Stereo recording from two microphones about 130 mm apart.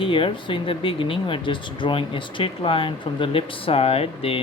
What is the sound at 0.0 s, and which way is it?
Speech, 40° left (ahead or behind).